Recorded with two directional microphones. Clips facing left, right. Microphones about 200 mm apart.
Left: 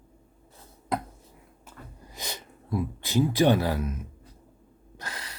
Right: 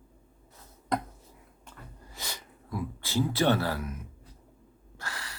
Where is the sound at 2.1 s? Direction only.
20° left (ahead or behind).